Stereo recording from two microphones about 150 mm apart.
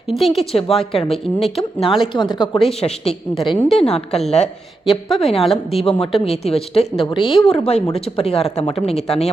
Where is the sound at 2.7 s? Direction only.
45° left (ahead or behind).